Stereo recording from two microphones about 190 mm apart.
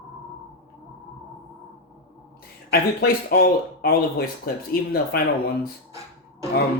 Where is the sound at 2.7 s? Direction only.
55° left (ahead or behind).